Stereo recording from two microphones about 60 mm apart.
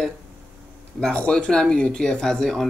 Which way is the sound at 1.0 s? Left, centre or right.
Centre.